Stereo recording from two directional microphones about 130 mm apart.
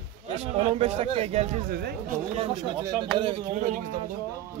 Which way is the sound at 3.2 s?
45° right (ahead or behind).